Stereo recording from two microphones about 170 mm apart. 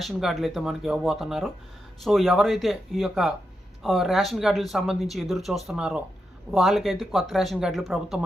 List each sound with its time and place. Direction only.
0.0 s speech: centre (ahead or behind)